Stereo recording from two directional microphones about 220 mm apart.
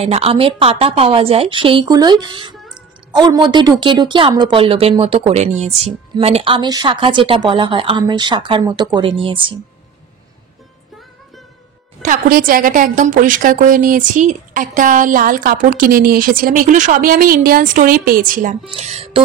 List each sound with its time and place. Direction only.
0.0 s speech: 25° right (ahead or behind)
12.0 s a woman's voice: 40° right (ahead or behind)